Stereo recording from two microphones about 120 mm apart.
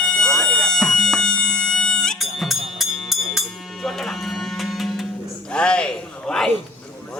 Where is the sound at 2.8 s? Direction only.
Centre (ahead or behind).